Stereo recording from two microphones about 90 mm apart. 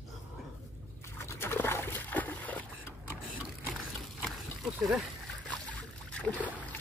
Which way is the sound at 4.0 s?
Centre (ahead or behind).